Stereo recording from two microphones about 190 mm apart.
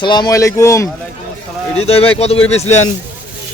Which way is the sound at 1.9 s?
30° left (ahead or behind).